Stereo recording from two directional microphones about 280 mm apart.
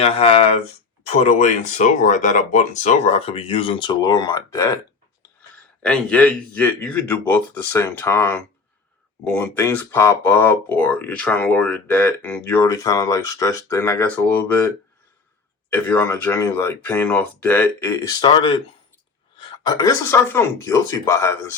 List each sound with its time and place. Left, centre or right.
0.0 s speech: left
5.8 s speech: centre
15.7 s speech: centre